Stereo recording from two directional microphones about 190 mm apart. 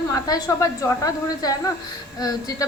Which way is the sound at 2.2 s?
20° left (ahead or behind).